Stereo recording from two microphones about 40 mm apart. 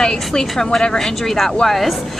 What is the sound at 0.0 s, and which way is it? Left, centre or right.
Speech, centre.